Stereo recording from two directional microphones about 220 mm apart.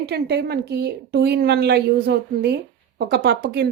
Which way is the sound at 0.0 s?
50° right (ahead or behind).